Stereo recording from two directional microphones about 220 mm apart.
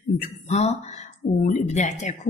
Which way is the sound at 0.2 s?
30° left (ahead or behind).